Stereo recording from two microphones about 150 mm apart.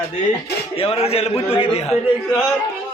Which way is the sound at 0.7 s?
40° left (ahead or behind).